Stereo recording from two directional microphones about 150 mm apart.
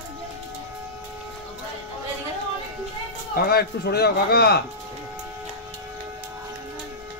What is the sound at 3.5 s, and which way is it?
Speech, 90° left.